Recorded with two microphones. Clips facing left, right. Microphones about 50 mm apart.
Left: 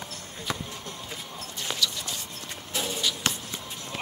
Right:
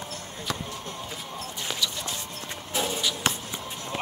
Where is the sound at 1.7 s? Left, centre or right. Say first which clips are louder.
Left 1 dB; centre.